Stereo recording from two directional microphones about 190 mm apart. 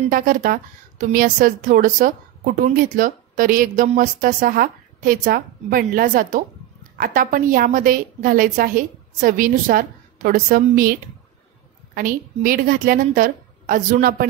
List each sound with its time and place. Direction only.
0.1 s a woman's voice: 45° right (ahead or behind)